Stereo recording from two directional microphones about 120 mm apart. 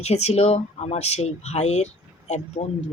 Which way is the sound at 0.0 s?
65° left (ahead or behind).